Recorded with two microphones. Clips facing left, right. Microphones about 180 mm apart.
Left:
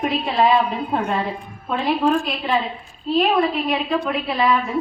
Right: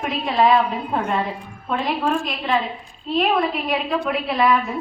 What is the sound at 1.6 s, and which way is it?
A woman's voice, 5° right (ahead or behind).